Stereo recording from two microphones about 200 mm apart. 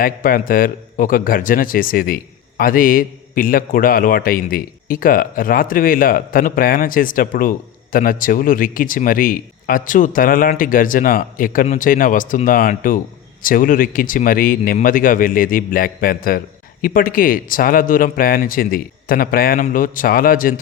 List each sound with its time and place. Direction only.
0.0 s a man's voice: 45° left (ahead or behind)